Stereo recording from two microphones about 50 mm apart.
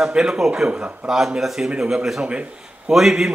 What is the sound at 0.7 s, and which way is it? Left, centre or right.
Speech, right.